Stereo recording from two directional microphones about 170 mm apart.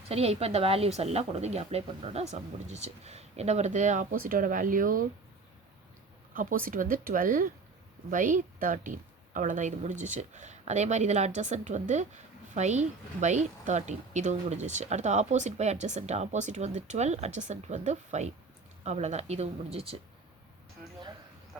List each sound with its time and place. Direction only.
0.1 s a woman's voice: 35° right (ahead or behind); by 5.0 s 55° right (ahead or behind)
6.3 s a woman's voice: 50° right (ahead or behind)